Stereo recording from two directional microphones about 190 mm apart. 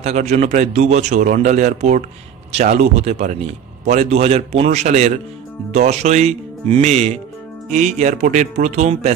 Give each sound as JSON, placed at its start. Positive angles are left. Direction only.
{"t": 0.0, "sound": "a man's voice", "side_deg": -35}